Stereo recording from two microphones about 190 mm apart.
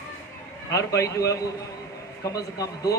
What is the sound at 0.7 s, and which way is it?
A man's voice, 15° left (ahead or behind).